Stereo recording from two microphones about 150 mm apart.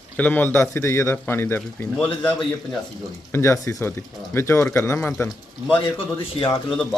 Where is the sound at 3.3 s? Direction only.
20° left (ahead or behind).